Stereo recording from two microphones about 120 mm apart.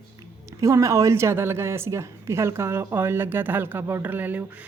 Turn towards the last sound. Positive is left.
turn(degrees=-15)  # may be behind; listen again after turning